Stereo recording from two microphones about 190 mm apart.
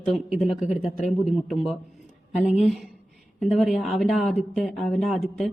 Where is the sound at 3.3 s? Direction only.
Centre (ahead or behind).